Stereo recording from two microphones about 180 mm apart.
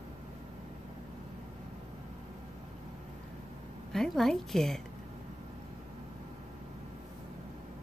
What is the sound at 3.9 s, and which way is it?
Speech, centre (ahead or behind).